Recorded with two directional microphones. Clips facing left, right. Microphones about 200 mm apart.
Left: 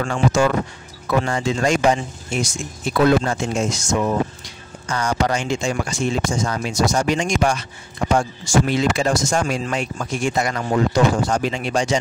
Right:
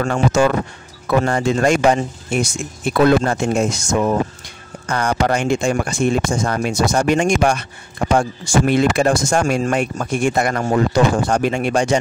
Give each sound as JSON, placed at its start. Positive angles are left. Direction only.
{"t": 0.0, "sound": "speech", "side_deg": -50}